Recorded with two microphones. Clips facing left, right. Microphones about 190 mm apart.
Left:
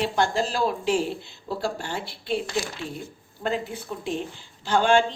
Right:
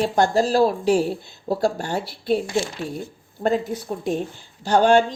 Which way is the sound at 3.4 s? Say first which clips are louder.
Right 6 dB; 40° right (ahead or behind).